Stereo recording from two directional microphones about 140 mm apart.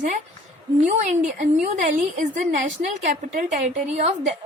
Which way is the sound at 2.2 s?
60° right (ahead or behind).